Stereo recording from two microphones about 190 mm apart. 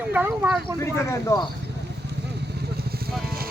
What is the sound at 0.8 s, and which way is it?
Speech, 15° left (ahead or behind).